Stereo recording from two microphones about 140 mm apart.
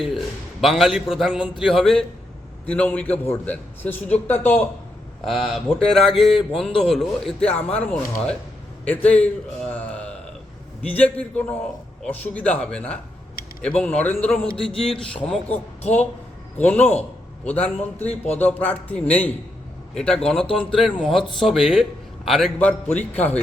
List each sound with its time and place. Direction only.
0.6 s a man's voice: centre (ahead or behind)
5.2 s a man's voice: centre (ahead or behind)
15.4 s speech: 45° left (ahead or behind)
16.6 s a man's voice: 10° left (ahead or behind)